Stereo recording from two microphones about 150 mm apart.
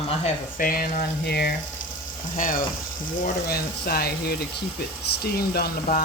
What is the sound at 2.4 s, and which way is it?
Speech, 65° left (ahead or behind).